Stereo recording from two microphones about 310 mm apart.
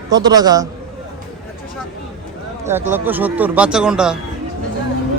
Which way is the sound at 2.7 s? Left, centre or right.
Centre.